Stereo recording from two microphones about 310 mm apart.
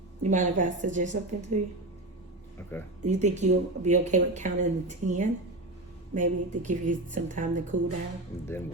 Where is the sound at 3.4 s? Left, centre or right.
Right.